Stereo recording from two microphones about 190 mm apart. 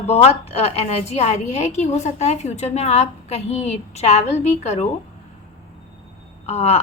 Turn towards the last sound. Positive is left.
turn(degrees=35)  # may be behind; listen again after turning